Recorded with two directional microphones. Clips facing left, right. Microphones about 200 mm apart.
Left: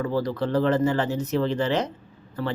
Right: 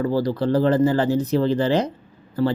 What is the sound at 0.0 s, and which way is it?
Speech, 35° right (ahead or behind).